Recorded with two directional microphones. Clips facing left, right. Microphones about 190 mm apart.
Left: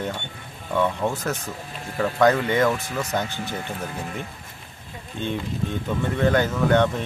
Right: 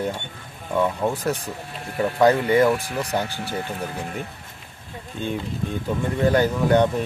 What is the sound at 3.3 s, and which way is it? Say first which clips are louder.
Speech: right 2 dB; 35° right (ahead or behind).